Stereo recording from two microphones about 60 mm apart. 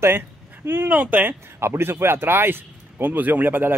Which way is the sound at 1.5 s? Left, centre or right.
Right.